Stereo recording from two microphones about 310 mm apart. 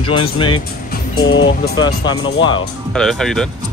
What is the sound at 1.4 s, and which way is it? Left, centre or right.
Speech, left.